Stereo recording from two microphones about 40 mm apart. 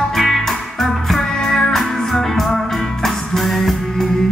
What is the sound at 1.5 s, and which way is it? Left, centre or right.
Music, centre.